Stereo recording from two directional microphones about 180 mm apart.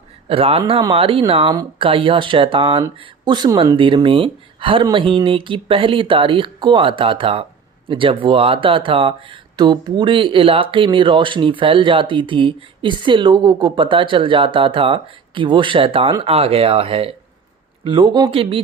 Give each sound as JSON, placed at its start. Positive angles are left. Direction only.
{"t": 0.3, "sound": "speech", "side_deg": -30}